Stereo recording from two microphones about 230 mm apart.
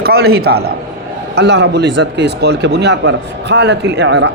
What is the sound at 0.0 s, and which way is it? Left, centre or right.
Speech, right.